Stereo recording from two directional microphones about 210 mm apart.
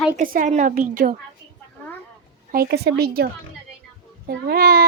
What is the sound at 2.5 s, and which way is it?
A child's voice, 50° right (ahead or behind).